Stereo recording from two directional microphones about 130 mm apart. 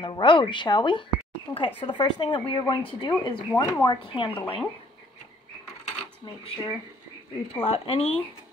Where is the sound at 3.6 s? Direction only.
25° left (ahead or behind).